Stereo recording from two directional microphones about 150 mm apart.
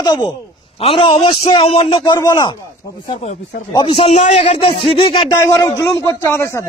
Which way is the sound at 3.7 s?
35° left (ahead or behind).